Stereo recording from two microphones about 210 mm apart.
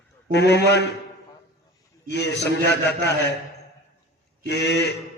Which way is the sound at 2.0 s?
55° left (ahead or behind).